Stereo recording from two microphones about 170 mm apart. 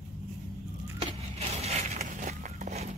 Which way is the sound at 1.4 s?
40° right (ahead or behind).